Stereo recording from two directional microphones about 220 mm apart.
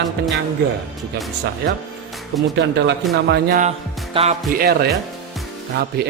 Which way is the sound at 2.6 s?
55° right (ahead or behind).